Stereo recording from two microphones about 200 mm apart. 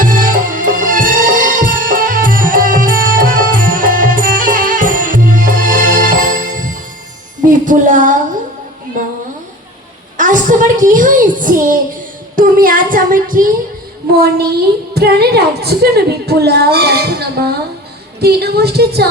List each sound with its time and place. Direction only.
0.0 s music: 45° right (ahead or behind)
10.2 s a sound: 40° right (ahead or behind)
14.1 s a child's voice: 50° right (ahead or behind)